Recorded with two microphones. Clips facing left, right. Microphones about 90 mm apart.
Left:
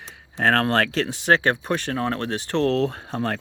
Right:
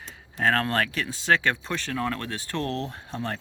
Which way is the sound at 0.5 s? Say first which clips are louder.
Left 7 dB; 65° left (ahead or behind).